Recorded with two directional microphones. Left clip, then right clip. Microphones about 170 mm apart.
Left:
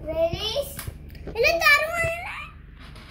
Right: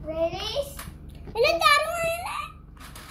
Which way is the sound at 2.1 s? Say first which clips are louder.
Right 2 dB; 5° right (ahead or behind).